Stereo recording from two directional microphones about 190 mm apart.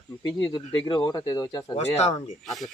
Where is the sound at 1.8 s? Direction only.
35° left (ahead or behind).